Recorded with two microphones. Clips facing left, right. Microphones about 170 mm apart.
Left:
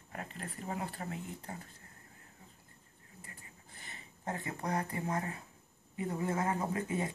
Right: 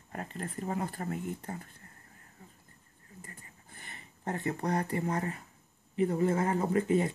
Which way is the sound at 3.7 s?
55° right (ahead or behind).